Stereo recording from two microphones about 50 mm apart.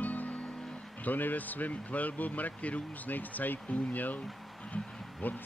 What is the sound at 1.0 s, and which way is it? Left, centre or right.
Speech, left.